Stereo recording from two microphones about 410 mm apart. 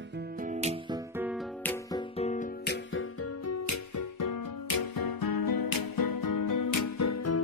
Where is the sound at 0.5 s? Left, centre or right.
Centre.